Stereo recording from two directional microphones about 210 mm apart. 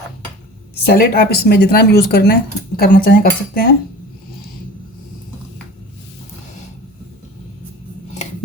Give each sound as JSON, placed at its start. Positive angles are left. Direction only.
{"t": 0.9, "sound": "speech", "side_deg": 45}